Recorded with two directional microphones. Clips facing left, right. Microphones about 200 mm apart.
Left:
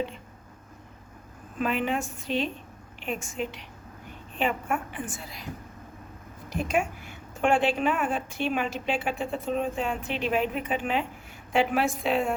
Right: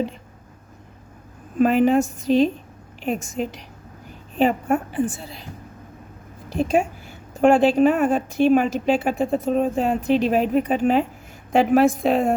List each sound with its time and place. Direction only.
1.5 s a woman's voice: 40° right (ahead or behind)
6.5 s a woman's voice: 30° right (ahead or behind)